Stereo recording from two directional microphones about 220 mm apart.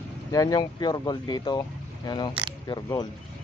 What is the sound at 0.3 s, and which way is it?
Speech, 15° left (ahead or behind).